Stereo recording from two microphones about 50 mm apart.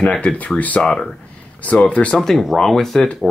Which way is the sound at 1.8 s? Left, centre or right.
Left.